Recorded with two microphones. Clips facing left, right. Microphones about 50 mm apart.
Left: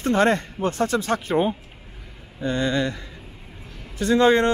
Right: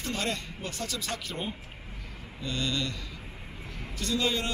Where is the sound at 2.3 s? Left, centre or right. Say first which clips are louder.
Left 9 dB; left.